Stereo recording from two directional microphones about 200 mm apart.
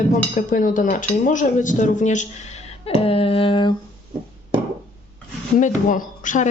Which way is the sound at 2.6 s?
30° left (ahead or behind).